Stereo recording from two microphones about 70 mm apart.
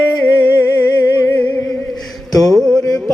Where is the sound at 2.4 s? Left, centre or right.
Centre.